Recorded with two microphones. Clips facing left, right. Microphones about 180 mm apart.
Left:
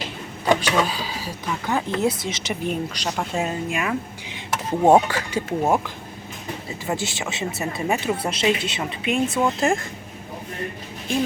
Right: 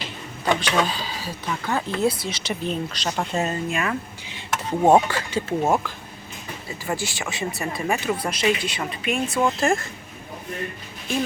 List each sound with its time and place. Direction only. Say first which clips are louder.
0.4 s speech: left 2 dB; 10° left (ahead or behind)
4.8 s speech: left 1 dB; centre (ahead or behind)
5.0 s speech: even; 15° left (ahead or behind)
9.2 s speech: even; centre (ahead or behind)